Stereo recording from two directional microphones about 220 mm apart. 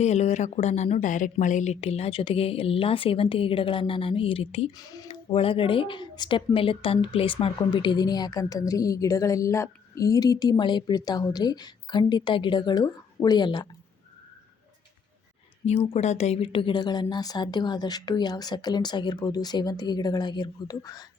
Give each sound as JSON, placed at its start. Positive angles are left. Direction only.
{"t": 0.0, "sound": "a woman's voice", "side_deg": 30}
{"t": 15.6, "sound": "a woman's voice", "side_deg": 25}